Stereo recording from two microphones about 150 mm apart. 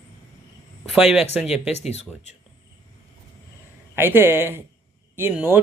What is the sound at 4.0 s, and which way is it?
Speech, 15° right (ahead or behind).